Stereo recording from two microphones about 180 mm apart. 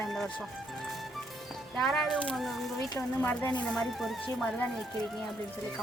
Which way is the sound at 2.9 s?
10° left (ahead or behind).